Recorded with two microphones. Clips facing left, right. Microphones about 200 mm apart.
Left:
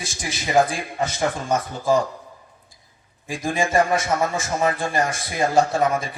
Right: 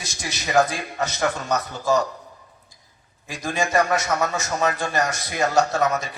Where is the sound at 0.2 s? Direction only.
25° left (ahead or behind).